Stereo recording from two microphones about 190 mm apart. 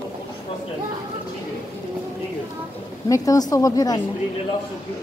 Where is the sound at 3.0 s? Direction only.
15° left (ahead or behind).